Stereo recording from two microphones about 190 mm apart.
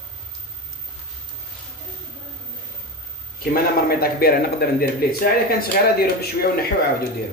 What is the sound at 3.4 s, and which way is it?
A man's voice, 55° left (ahead or behind).